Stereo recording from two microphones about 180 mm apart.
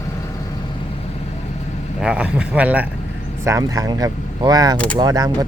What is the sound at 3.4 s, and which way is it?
Speech, 20° right (ahead or behind).